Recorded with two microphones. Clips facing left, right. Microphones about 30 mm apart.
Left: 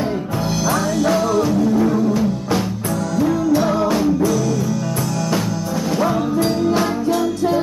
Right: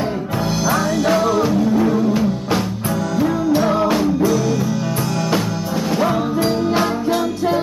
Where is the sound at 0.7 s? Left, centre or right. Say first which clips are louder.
Right 1 dB; centre.